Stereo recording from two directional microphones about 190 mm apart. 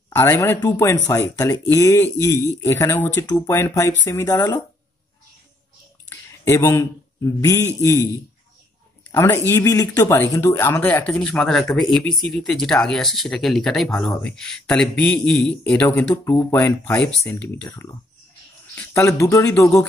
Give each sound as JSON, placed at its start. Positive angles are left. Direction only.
{"t": 0.1, "sound": "a man's voice", "side_deg": 10}
{"t": 6.0, "sound": "a sound", "side_deg": 15}
{"t": 7.4, "sound": "a man's voice", "side_deg": 15}
{"t": 9.1, "sound": "a man's voice", "side_deg": 15}